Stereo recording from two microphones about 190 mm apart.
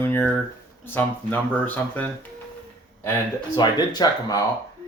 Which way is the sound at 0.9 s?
10° left (ahead or behind).